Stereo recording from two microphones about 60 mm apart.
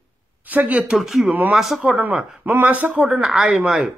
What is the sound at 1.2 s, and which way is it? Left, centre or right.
Speech, right.